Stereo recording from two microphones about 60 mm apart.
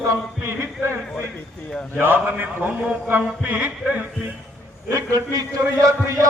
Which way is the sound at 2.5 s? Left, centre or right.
Right.